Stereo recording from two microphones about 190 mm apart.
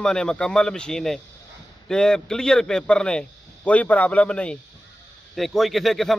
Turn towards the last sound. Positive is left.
turn(degrees=0)  # may be behind; listen again after turning